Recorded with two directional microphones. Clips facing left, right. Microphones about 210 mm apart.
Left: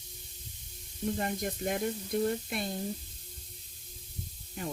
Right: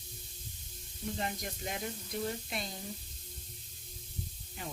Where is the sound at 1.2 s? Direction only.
50° left (ahead or behind).